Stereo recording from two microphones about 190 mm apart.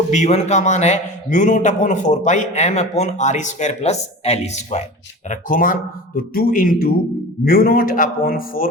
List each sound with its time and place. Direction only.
0.1 s a man's voice: 35° left (ahead or behind)